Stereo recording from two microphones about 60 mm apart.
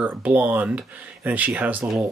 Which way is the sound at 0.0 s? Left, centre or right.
Right.